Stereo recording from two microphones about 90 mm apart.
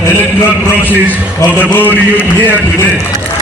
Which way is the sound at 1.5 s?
20° left (ahead or behind).